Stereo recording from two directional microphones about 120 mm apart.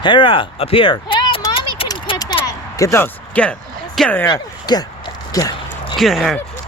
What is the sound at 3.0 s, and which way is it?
Speech, 10° left (ahead or behind).